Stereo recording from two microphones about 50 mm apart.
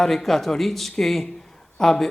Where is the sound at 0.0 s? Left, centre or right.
Centre.